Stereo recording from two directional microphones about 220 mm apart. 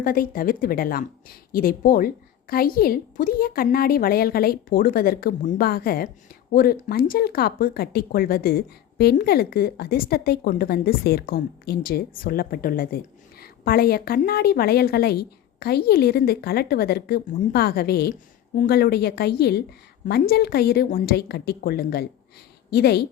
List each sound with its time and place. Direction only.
0.0 s a woman's voice: 40° left (ahead or behind)